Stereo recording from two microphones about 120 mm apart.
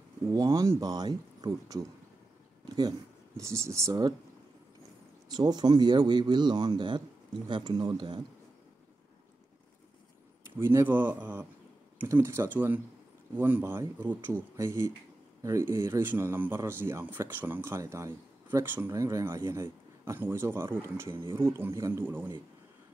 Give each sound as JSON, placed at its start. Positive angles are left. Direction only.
{"t": 0.3, "sound": "speech", "side_deg": -30}
{"t": 3.3, "sound": "speech", "side_deg": -25}
{"t": 5.3, "sound": "speech", "side_deg": -35}
{"t": 10.6, "sound": "speech", "side_deg": -20}